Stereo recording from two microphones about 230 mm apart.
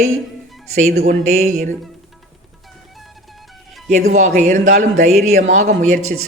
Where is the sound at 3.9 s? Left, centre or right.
Right.